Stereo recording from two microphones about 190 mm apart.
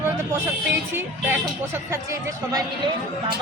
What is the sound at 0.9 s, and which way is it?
Speech, 10° right (ahead or behind).